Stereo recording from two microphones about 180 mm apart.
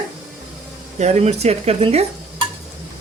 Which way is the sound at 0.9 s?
40° right (ahead or behind).